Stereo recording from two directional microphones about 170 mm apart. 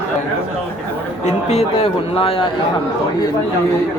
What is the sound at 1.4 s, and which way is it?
Speech, 35° left (ahead or behind).